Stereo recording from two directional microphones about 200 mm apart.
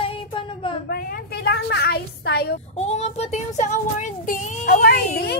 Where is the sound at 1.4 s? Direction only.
55° left (ahead or behind).